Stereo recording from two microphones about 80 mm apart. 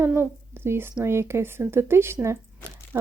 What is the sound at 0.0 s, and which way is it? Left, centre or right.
A woman's voice, right.